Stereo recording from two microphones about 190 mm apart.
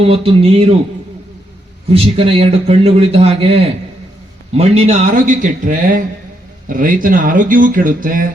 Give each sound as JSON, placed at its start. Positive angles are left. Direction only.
{"t": 0.0, "sound": "speech", "side_deg": -30}
{"t": 1.9, "sound": "a man's voice", "side_deg": -30}